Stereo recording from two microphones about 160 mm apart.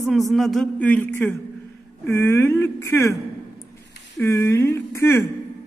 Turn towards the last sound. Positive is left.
turn(degrees=15)  # may be behind; listen again after turning